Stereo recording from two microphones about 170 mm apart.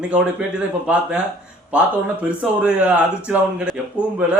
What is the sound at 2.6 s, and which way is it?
Speech, 10° right (ahead or behind).